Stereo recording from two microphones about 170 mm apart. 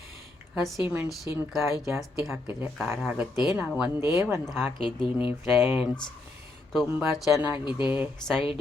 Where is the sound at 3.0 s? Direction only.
5° right (ahead or behind).